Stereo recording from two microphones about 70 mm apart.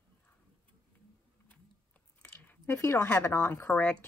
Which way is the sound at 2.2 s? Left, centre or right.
Left.